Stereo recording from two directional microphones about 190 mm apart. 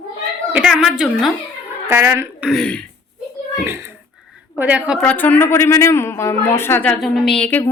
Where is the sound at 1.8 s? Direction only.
15° right (ahead or behind).